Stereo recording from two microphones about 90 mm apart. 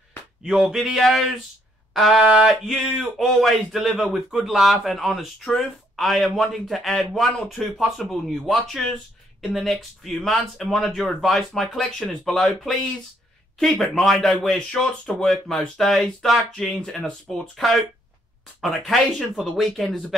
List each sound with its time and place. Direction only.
0.4 s speech: 5° right (ahead or behind)